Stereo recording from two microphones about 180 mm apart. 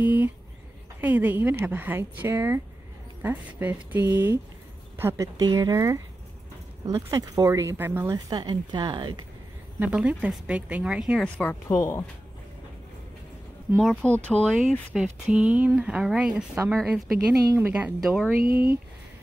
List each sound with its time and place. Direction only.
0.0 s a sound: 10° right (ahead or behind)
1.0 s speech: 10° right (ahead or behind)
8.3 s speech: 25° right (ahead or behind)
9.8 s speech: 5° right (ahead or behind)
11.4 s speech: 15° left (ahead or behind)
13.7 s speech: 5° left (ahead or behind)
15.2 s speech: 5° right (ahead or behind)
17.3 s speech: 20° right (ahead or behind)
17.6 s speech: 10° right (ahead or behind)
18.4 s speech: 60° right (ahead or behind)